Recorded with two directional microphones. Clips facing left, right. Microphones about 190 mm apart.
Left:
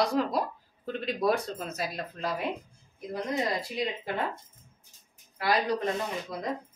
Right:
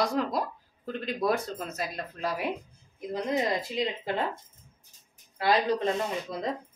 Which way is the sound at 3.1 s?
20° right (ahead or behind).